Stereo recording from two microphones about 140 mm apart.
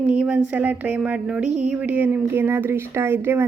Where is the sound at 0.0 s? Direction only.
5° right (ahead or behind).